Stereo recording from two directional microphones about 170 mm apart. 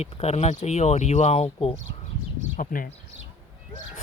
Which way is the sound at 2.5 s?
55° left (ahead or behind).